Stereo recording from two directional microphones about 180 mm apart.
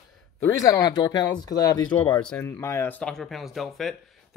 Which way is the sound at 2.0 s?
5° left (ahead or behind).